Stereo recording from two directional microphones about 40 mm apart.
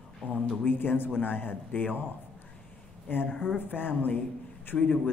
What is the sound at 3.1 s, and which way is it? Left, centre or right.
Speech, left.